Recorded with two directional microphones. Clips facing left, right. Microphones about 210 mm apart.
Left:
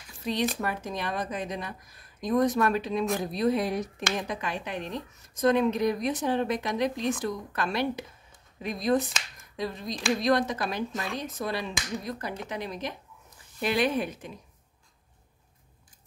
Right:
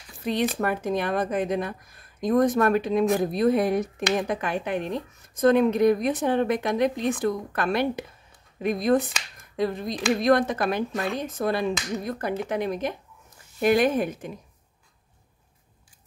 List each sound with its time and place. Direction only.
0.2 s a woman's voice: 55° right (ahead or behind)